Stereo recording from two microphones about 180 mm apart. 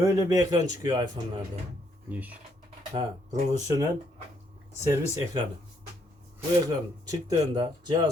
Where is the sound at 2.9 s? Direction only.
20° right (ahead or behind).